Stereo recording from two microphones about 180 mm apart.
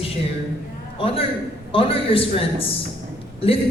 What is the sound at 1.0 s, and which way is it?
A woman's voice, 30° left (ahead or behind).